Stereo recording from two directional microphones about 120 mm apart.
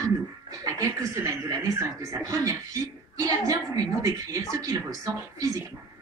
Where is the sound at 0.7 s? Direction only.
30° right (ahead or behind).